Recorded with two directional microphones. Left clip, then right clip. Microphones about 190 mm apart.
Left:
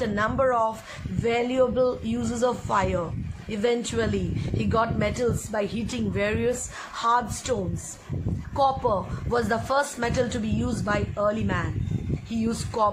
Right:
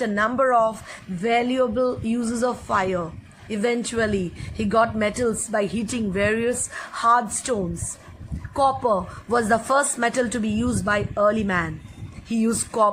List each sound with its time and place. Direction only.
0.0 s speech: 20° right (ahead or behind)